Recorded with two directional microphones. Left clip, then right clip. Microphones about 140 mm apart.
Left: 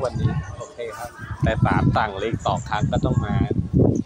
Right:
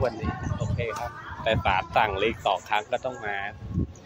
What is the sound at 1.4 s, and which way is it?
Speech, 20° right (ahead or behind).